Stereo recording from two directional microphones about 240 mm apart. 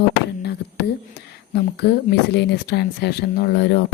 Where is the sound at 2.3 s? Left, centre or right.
Left.